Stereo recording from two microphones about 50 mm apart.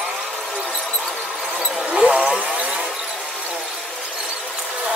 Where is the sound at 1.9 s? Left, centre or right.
Right.